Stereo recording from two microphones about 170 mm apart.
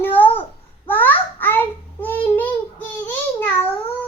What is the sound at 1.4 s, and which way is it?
Child singing, 10° left (ahead or behind).